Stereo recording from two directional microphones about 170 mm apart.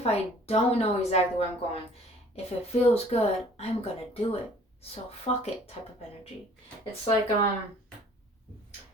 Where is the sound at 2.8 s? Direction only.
35° left (ahead or behind).